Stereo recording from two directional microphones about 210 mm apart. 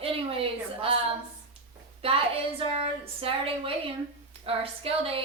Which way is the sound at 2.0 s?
30° right (ahead or behind).